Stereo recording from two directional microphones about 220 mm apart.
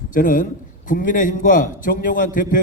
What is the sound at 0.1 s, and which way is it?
A man's voice, 40° left (ahead or behind).